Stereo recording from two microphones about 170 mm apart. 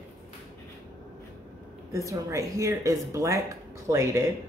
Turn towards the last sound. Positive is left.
turn(degrees=-15)  # may be behind; listen again after turning